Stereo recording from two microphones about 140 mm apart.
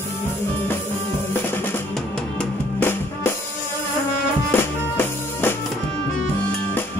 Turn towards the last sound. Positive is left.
turn(degrees=15)  # may be behind; listen again after turning